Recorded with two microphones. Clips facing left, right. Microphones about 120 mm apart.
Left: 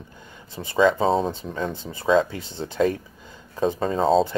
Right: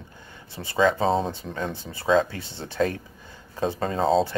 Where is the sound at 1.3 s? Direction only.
15° left (ahead or behind).